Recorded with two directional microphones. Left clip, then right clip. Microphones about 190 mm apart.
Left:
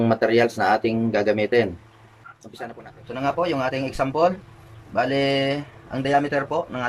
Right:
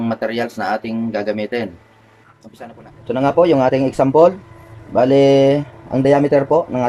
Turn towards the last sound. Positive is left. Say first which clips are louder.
# right 9 dB
turn(degrees=-30)  # may be behind; listen again after turning